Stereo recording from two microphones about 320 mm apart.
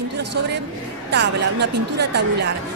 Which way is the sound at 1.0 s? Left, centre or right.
Right.